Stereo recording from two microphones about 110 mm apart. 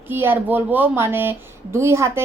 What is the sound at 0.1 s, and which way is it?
A woman's voice, 20° right (ahead or behind).